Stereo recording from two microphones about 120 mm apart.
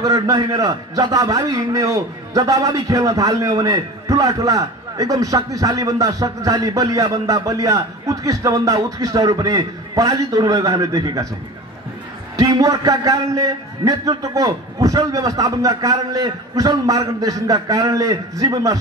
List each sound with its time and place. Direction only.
0.0 s a man's voice: 30° right (ahead or behind)
12.4 s a man's voice: 30° right (ahead or behind)